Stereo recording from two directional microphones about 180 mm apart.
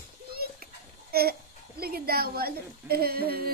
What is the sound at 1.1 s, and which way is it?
Babbling, 60° right (ahead or behind).